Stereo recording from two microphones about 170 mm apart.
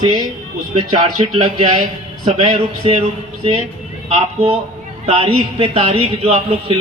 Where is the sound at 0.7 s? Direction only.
40° right (ahead or behind).